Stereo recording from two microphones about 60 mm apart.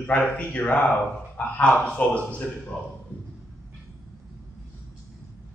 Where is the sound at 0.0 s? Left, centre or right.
Left.